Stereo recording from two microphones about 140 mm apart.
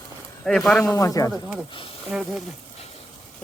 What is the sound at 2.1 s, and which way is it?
Speech, 5° right (ahead or behind).